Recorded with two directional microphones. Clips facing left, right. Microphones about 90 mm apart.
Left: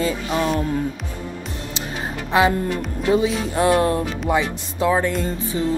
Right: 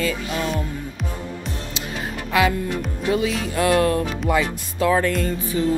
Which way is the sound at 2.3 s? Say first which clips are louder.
Left 2 dB; 30° left (ahead or behind).